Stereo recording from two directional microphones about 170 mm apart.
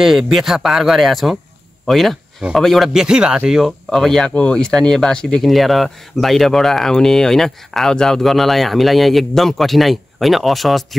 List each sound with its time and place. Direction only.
0.0 s speech: centre (ahead or behind)